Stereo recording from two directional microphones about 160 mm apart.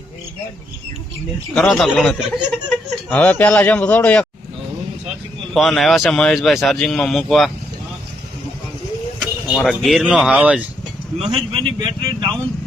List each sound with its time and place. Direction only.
1.5 s speech: centre (ahead or behind)
5.5 s speech: centre (ahead or behind)
9.2 s speech: centre (ahead or behind)
11.8 s speech: 20° right (ahead or behind)